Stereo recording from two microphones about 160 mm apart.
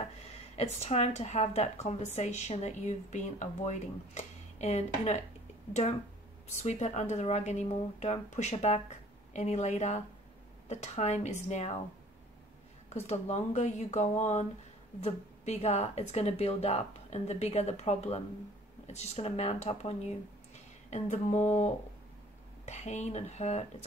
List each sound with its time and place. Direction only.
0.7 s speech: 45° left (ahead or behind)
12.9 s speech: 40° left (ahead or behind)
22.7 s speech: 45° left (ahead or behind)